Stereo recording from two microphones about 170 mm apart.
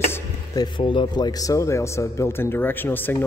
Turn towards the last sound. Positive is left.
turn(degrees=10)  # may be behind; listen again after turning